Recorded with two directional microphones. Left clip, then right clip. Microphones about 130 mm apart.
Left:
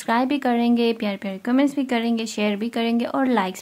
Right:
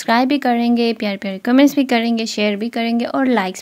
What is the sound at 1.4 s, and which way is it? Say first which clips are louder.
Speech: right 8 dB; 50° right (ahead or behind).